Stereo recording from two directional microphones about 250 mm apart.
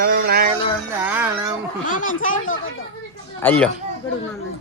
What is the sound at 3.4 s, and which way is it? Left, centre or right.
Speech, centre.